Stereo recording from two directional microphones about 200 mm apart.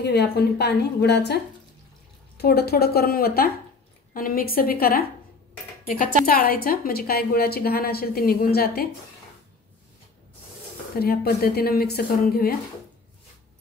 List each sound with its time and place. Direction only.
0.0 s a woman's voice: 55° left (ahead or behind)
6.2 s a woman's voice: 45° left (ahead or behind)
11.0 s a woman's voice: 50° left (ahead or behind)